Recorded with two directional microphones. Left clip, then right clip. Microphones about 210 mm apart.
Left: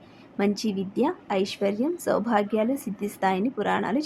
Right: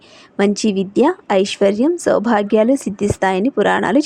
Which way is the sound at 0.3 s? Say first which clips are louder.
Right 10 dB; 40° right (ahead or behind).